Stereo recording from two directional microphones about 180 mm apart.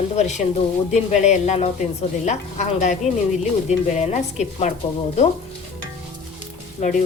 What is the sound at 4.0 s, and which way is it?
Speech, 40° left (ahead or behind).